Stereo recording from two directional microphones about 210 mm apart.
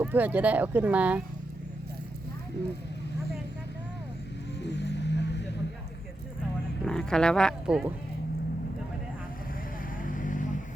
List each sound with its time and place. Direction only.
0.0 s speech: 10° right (ahead or behind)
4.6 s music: 55° left (ahead or behind)
6.8 s speech: 5° left (ahead or behind)
10.0 s vehicle: 40° left (ahead or behind)